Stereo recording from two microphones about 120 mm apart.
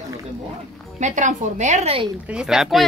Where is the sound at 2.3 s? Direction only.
5° right (ahead or behind).